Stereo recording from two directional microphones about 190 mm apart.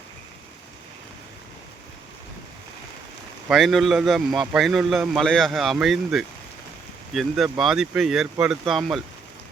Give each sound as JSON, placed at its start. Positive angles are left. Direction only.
{"t": 3.5, "sound": "speech", "side_deg": 0}